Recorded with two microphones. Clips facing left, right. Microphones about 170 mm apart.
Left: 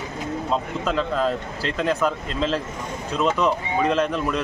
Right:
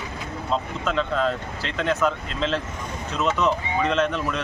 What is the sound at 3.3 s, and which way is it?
Speech, 30° left (ahead or behind).